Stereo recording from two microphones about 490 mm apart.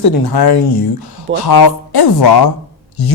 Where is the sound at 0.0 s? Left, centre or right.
Left.